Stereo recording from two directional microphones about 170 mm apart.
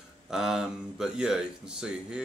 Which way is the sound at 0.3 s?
5° right (ahead or behind).